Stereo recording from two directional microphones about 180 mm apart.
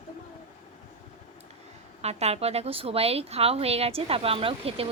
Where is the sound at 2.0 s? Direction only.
35° right (ahead or behind).